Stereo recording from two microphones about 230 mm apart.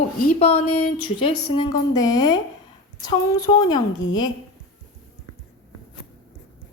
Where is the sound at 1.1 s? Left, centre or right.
Left.